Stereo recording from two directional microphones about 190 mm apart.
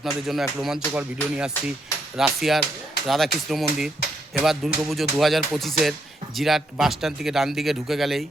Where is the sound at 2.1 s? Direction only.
Centre (ahead or behind).